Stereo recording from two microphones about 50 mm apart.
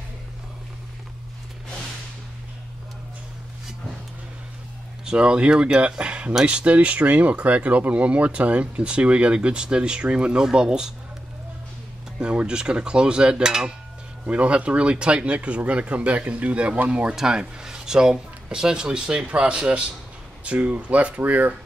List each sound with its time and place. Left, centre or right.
5.0 s speech: centre
12.2 s speech: centre
14.2 s speech: right
17.1 s speech: centre; by 21.5 s right